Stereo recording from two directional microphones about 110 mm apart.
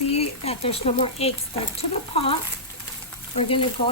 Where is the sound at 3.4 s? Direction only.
60° left (ahead or behind).